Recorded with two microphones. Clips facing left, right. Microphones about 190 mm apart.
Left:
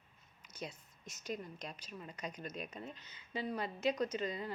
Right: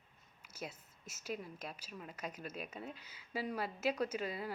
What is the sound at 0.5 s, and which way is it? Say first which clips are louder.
A woman's voice: left 1 dB; 5° right (ahead or behind).